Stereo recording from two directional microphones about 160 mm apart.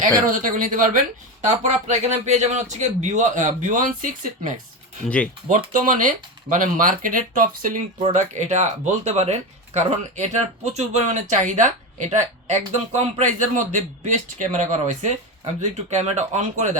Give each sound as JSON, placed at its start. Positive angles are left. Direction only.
{"t": 0.3, "sound": "speech", "side_deg": -55}
{"t": 5.0, "sound": "speech", "side_deg": 10}
{"t": 5.5, "sound": "speech", "side_deg": -60}